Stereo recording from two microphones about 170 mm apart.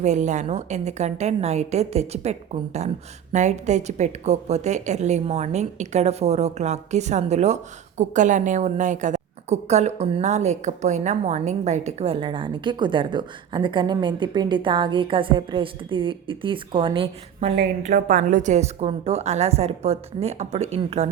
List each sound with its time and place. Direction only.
0.0 s a woman's voice: 45° right (ahead or behind)
17.8 s a woman's voice: 50° right (ahead or behind)